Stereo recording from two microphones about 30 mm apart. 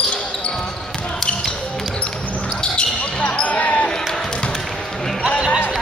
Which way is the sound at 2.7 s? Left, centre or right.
Left.